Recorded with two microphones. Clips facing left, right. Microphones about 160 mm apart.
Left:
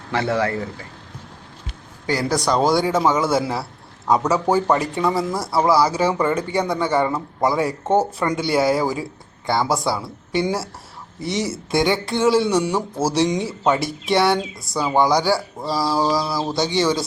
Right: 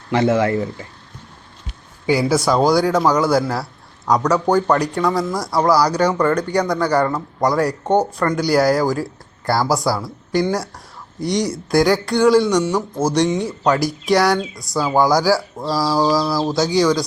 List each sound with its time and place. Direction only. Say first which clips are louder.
0.1 s speech: right 5 dB; 20° right (ahead or behind)
2.0 s speech: right 4 dB; 5° right (ahead or behind)